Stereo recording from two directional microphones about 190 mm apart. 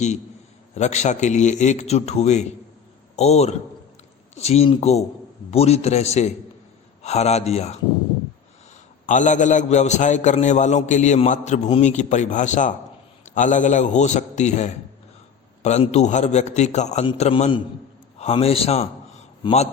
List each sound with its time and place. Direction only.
0.8 s a man's voice: 35° left (ahead or behind)
9.0 s a man's voice: 40° left (ahead or behind)